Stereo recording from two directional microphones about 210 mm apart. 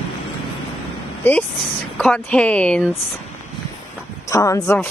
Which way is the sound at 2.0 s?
5° left (ahead or behind).